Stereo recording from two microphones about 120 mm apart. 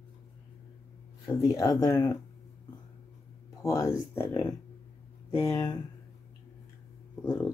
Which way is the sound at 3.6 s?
25° left (ahead or behind).